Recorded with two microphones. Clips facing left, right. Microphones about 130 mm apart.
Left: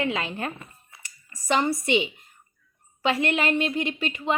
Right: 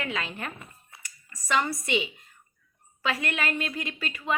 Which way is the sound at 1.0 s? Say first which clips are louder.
Left 1 dB; 30° left (ahead or behind).